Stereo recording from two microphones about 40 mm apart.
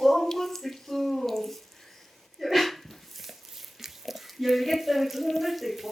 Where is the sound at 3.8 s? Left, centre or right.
Centre.